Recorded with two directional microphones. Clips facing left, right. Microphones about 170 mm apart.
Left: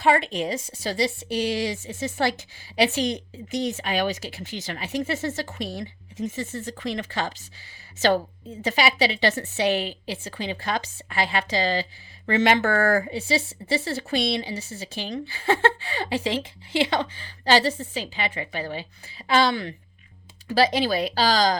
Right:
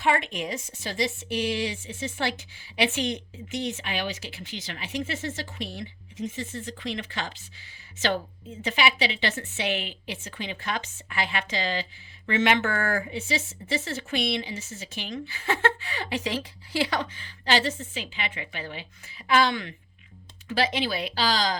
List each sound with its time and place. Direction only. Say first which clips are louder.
0.0 s a woman's voice: left 4 dB; 35° left (ahead or behind)